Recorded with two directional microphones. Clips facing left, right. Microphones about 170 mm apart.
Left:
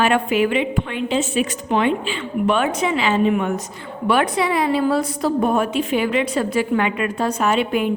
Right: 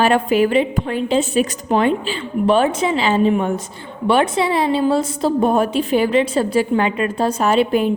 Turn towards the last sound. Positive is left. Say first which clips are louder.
# right 3 dB
turn(degrees=-35)  # may be behind; listen again after turning